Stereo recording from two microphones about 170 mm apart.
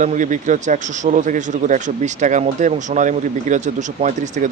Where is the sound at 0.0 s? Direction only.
45° right (ahead or behind).